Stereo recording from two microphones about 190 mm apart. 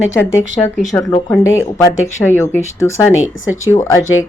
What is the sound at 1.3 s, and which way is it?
Speech, 15° left (ahead or behind).